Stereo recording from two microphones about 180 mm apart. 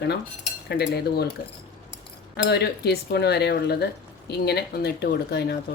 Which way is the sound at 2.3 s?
65° left (ahead or behind).